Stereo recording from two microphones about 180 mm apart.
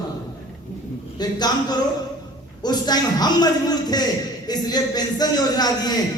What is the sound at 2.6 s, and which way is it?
A man's voice, 20° left (ahead or behind).